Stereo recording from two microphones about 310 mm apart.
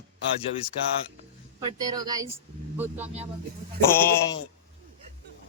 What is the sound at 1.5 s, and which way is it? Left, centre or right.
Speech, centre.